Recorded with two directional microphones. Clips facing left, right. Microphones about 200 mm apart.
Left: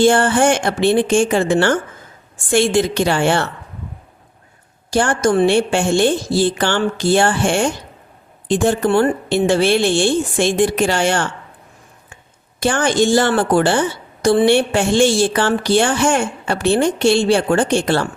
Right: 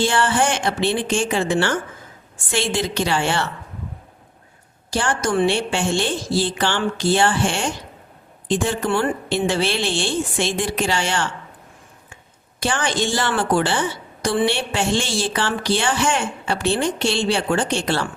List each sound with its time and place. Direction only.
0.0 s a woman's voice: 50° left (ahead or behind)
4.9 s a woman's voice: 50° left (ahead or behind)
12.5 s a woman's voice: 50° left (ahead or behind)